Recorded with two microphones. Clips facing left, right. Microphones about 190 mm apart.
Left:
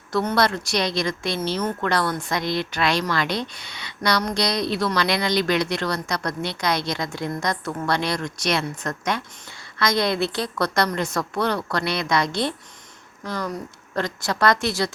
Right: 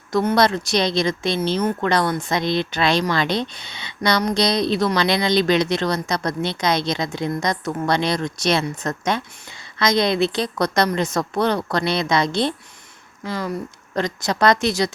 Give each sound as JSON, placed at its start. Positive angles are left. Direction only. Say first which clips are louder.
{"t": 0.1, "sound": "a woman's voice", "louder": "right 4 dB", "side_deg": -15}
{"t": 13.9, "sound": "a woman's voice", "louder": "right 3 dB", "side_deg": -20}